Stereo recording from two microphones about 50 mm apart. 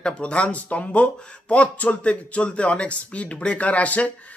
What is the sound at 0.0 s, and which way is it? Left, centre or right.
Speech, left.